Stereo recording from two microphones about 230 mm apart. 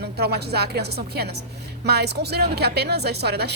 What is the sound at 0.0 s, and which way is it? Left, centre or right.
A woman's voice, right.